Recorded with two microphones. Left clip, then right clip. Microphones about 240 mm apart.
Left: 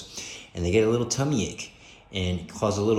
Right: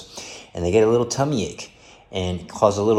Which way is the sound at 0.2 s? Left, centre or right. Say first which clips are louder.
Right 6 dB; centre.